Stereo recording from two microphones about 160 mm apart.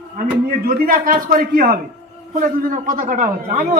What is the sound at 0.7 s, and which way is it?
A man's voice, 60° right (ahead or behind).